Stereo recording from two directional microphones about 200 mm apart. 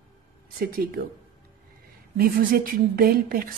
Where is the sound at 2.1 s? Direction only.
45° right (ahead or behind).